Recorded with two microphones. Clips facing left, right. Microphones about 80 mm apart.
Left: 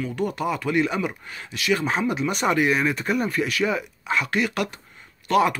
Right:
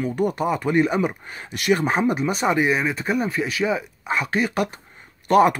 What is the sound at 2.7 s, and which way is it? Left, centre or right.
Speech, centre.